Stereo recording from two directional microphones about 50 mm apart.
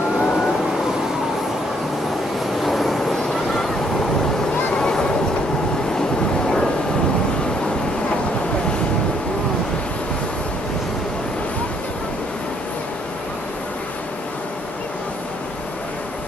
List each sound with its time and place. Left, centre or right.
0.2 s vehicle: centre
2.6 s vehicle: centre
4.7 s vehicle: centre